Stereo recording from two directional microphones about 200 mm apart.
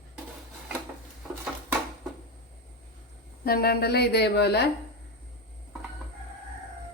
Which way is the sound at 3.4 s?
50° left (ahead or behind).